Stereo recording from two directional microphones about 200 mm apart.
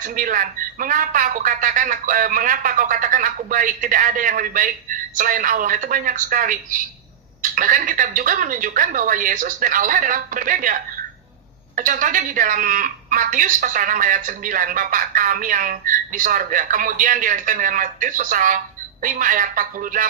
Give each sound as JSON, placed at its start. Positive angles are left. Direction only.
{"t": 0.0, "sound": "speech", "side_deg": -40}